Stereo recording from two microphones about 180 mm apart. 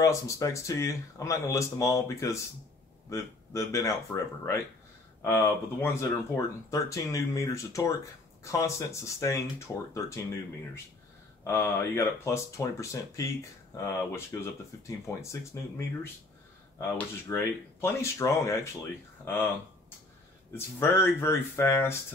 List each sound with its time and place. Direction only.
0.0 s speech: 15° left (ahead or behind)
11.4 s speech: 15° left (ahead or behind)
16.9 s speech: 10° left (ahead or behind)
20.5 s speech: 15° left (ahead or behind)